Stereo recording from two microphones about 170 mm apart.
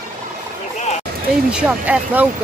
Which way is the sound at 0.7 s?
40° left (ahead or behind).